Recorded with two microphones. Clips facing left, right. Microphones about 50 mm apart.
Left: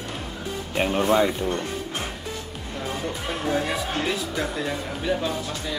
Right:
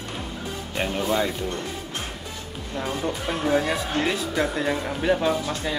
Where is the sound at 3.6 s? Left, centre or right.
Right.